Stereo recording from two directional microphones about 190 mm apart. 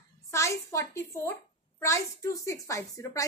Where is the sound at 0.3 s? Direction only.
15° left (ahead or behind).